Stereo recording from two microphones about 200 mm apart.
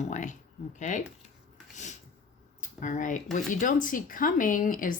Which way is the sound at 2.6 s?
40° left (ahead or behind).